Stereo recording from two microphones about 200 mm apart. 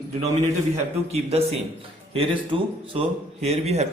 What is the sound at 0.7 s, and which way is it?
A man's voice, 30° right (ahead or behind).